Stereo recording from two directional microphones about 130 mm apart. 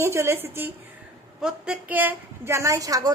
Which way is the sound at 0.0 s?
20° right (ahead or behind).